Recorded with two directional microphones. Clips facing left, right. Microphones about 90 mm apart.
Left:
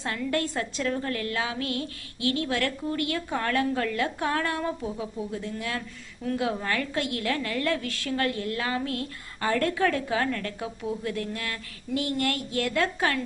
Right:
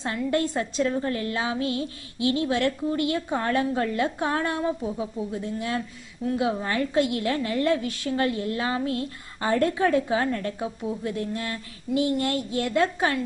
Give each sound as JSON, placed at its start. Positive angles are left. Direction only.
{"t": 0.0, "sound": "a woman's voice", "side_deg": -20}